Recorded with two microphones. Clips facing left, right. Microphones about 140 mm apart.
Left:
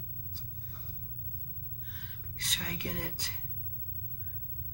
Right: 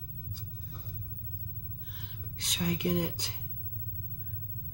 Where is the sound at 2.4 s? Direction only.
20° right (ahead or behind).